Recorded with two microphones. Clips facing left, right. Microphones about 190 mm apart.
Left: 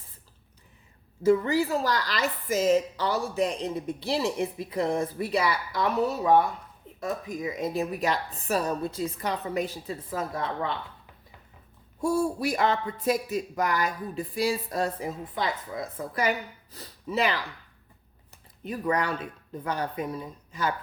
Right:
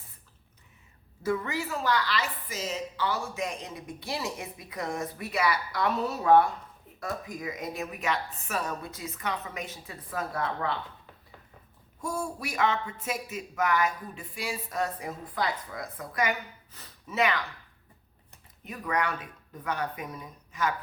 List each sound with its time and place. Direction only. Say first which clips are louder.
1.3 s speech: left 8 dB; 35° left (ahead or behind)
11.9 s speech: left 8 dB; 30° left (ahead or behind)
18.6 s speech: left 3 dB; 30° left (ahead or behind)